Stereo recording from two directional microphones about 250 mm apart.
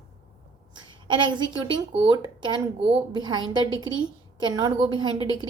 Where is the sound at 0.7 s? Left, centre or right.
Centre.